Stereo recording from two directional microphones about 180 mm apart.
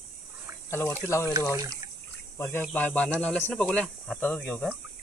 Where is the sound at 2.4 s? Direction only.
15° left (ahead or behind).